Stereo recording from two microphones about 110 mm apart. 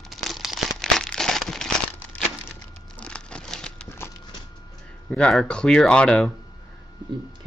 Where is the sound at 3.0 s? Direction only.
10° left (ahead or behind).